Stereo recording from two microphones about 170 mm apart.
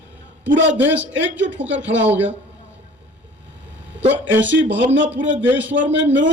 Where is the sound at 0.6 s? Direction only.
90° right.